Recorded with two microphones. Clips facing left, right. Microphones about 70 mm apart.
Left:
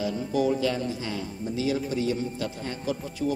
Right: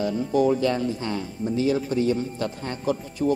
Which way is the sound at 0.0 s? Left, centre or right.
Right.